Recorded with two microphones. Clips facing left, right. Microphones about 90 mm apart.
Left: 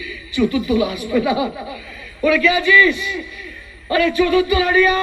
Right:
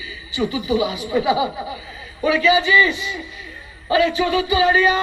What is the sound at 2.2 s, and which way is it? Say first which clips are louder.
Speech: left 1 dB; 30° right (ahead or behind).